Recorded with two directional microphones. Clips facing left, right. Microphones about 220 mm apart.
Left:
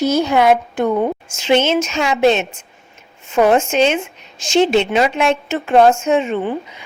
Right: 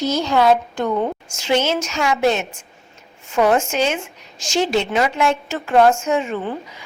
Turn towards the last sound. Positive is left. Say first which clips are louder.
# left 5 dB
turn(degrees=20)  # may be behind; listen again after turning